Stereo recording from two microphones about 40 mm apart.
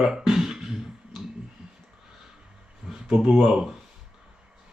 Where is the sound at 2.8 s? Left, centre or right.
Right.